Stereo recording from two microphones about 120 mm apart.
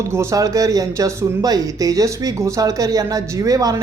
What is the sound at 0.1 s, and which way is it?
Speech, 25° right (ahead or behind).